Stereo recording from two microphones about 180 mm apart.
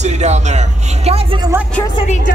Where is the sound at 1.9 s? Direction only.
40° left (ahead or behind).